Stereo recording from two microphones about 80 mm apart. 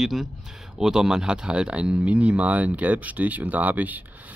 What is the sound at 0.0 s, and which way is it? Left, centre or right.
Speech, centre.